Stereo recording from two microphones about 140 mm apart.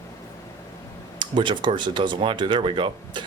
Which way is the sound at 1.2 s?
35° right (ahead or behind).